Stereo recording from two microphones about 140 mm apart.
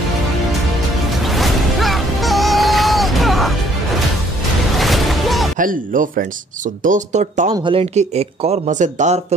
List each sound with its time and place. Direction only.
1.2 s music: centre (ahead or behind)
4.7 s music: centre (ahead or behind)
5.6 s speech: 75° right (ahead or behind)
6.8 s speech: 60° right (ahead or behind)
7.5 s speech: 40° right (ahead or behind); by 9.2 s 55° right (ahead or behind)